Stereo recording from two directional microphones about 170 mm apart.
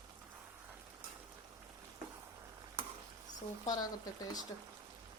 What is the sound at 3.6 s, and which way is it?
Speech, 20° left (ahead or behind).